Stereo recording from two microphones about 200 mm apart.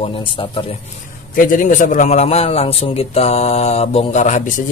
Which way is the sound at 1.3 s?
40° left (ahead or behind).